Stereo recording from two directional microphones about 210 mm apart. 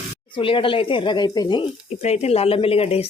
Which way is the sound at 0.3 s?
25° left (ahead or behind).